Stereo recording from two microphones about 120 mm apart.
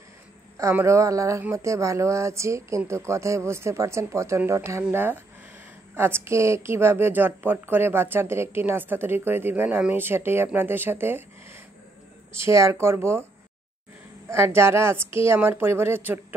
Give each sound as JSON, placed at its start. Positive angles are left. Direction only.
{"t": 0.6, "sound": "a woman's voice", "side_deg": -25}
{"t": 4.4, "sound": "a woman's voice", "side_deg": -15}
{"t": 14.3, "sound": "a woman's voice", "side_deg": -20}